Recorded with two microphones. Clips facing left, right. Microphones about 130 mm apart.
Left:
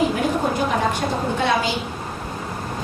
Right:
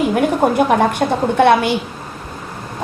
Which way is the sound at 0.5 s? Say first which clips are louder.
Right 7 dB; 60° right (ahead or behind).